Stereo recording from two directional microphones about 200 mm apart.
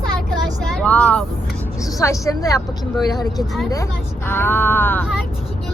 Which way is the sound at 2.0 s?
15° left (ahead or behind).